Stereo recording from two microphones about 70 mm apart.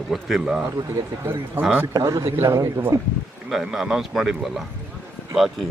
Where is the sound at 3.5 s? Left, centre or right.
Centre.